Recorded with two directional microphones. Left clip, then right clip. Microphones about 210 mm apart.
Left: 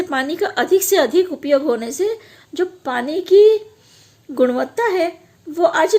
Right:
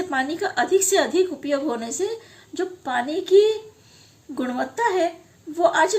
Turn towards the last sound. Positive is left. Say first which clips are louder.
# left 3 dB
turn(degrees=40)  # may be behind; listen again after turning